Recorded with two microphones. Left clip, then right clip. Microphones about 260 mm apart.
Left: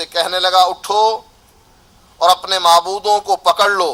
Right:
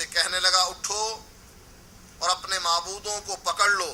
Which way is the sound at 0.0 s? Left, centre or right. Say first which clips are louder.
Left 8 dB; left.